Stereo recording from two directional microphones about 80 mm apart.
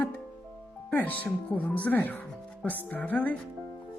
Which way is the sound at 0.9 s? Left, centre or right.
Centre.